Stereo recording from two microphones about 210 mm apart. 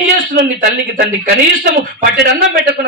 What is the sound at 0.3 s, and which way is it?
A man's voice, 50° right (ahead or behind).